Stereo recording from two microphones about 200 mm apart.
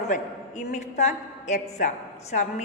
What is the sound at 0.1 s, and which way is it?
A woman's voice, 35° left (ahead or behind).